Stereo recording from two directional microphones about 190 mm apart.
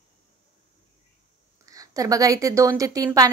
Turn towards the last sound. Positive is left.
turn(degrees=-20)  # may be behind; listen again after turning